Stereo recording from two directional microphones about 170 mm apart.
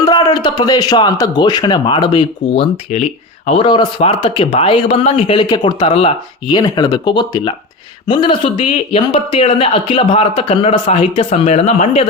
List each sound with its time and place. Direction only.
0.0 s a man's voice: 25° left (ahead or behind); by 12.0 s 40° left (ahead or behind)